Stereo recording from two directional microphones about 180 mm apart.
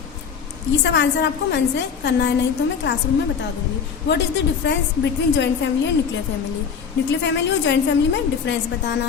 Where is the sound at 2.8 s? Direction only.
90° left.